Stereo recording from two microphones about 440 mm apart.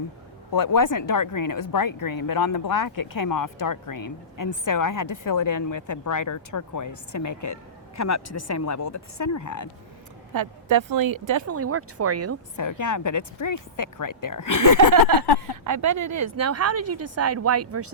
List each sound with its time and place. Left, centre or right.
0.5 s a woman's voice: left
10.7 s speech: right
12.5 s speech: left
15.6 s speech: right